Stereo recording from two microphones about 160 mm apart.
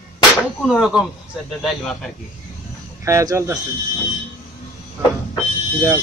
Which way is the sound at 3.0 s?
20° right (ahead or behind).